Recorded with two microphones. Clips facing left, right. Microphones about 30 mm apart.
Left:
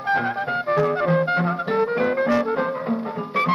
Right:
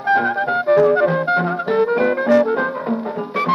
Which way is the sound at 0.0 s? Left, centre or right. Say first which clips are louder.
Right 5 dB; centre.